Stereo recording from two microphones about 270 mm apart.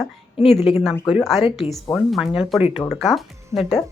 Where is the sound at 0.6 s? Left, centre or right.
Left.